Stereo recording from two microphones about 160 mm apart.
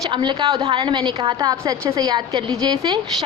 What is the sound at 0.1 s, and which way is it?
A woman's voice, 30° right (ahead or behind).